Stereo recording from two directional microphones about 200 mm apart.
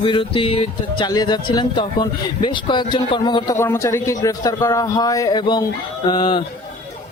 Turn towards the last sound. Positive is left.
turn(degrees=25)  # may be behind; listen again after turning